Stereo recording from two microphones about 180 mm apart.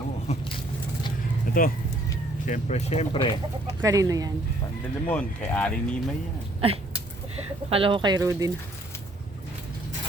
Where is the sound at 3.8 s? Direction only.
20° right (ahead or behind).